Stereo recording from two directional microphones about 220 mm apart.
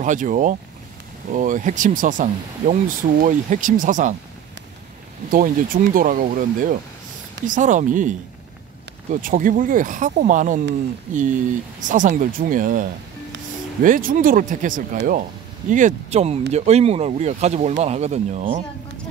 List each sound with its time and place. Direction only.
0.0 s speech: 35° right (ahead or behind)
5.3 s speech: 40° right (ahead or behind)
13.8 s speech: 40° right (ahead or behind)